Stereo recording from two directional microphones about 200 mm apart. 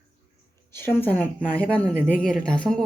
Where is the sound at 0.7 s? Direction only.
10° left (ahead or behind).